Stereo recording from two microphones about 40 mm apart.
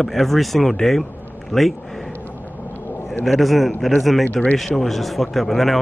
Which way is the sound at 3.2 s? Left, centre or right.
Centre.